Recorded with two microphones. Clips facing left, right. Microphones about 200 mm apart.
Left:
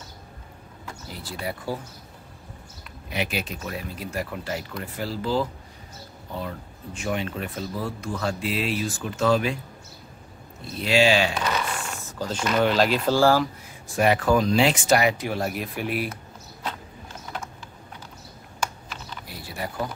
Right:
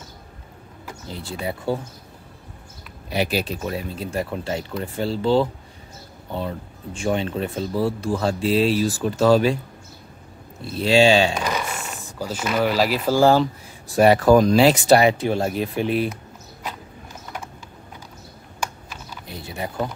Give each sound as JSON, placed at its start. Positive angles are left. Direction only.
{"t": 1.0, "sound": "speech", "side_deg": -25}
{"t": 3.1, "sound": "speech", "side_deg": -35}
{"t": 10.8, "sound": "speech", "side_deg": -30}
{"t": 11.3, "sound": "speech", "side_deg": -10}
{"t": 13.2, "sound": "speech", "side_deg": -20}
{"t": 13.8, "sound": "speech", "side_deg": -35}
{"t": 18.6, "sound": "computer keyboard", "side_deg": -10}
{"t": 19.2, "sound": "a sound", "side_deg": -20}